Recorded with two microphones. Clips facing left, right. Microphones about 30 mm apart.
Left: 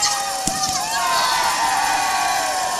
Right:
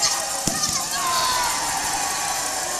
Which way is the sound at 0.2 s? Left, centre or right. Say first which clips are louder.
Left 4 dB; left.